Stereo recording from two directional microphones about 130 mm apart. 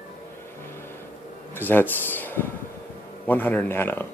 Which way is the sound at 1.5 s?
15° left (ahead or behind).